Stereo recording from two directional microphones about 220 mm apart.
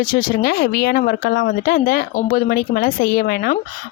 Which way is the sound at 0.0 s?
40° left (ahead or behind).